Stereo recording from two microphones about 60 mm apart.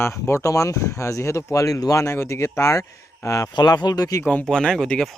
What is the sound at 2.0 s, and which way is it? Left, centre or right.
Speech, left.